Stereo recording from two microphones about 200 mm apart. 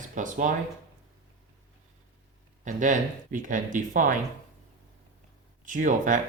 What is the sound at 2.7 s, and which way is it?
Speech, 40° right (ahead or behind).